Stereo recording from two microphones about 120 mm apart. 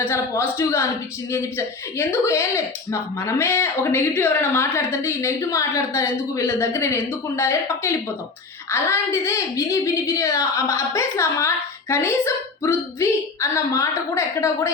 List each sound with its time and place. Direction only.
0.1 s speech: 25° left (ahead or behind)